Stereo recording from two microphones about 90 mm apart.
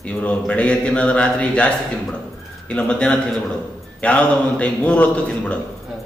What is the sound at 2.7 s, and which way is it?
A man's voice, 10° left (ahead or behind).